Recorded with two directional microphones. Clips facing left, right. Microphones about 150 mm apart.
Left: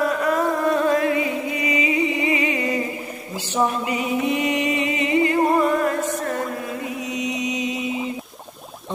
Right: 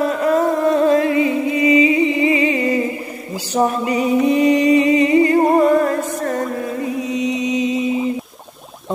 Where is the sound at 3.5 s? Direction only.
40° right (ahead or behind).